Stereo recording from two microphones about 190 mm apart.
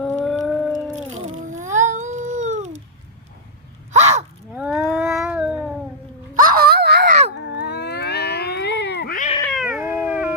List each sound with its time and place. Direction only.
0.0 s a sound: 5° left (ahead or behind)
1.3 s cat: 40° right (ahead or behind)
3.9 s a sound: 35° right (ahead or behind)
4.5 s cat: 5° right (ahead or behind)
6.4 s dog: 50° right (ahead or behind)
7.3 s cat: 60° left (ahead or behind)
9.5 s cat: centre (ahead or behind)